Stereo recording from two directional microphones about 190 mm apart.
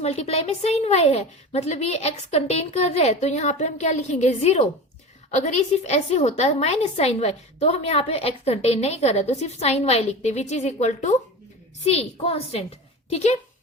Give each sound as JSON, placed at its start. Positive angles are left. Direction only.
{"t": 0.0, "sound": "a woman's voice", "side_deg": 35}